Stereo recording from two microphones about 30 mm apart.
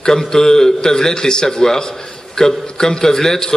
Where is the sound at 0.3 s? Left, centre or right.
Centre.